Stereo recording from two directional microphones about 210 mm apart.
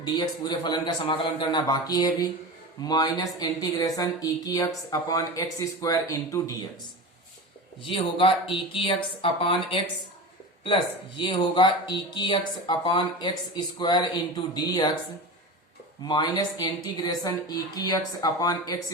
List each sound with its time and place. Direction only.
0.0 s speech: 20° left (ahead or behind)
7.8 s speech: 25° left (ahead or behind)
11.2 s speech: 25° left (ahead or behind)
16.0 s speech: 20° left (ahead or behind)